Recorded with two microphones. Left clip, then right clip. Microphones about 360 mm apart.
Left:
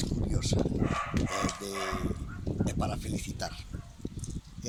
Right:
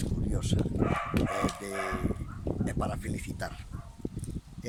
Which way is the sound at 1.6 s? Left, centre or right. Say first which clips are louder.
Right 1 dB; centre.